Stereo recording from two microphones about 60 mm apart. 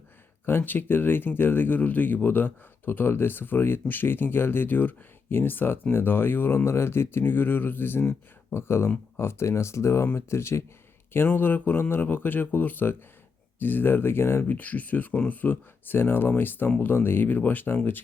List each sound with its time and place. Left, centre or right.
0.4 s speech: left
11.3 s speech: left
14.4 s speech: left